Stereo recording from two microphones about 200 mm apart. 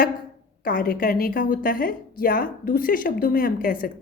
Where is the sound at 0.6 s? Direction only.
45° left (ahead or behind).